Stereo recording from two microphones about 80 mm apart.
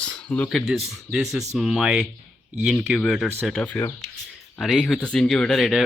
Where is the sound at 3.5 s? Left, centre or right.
Centre.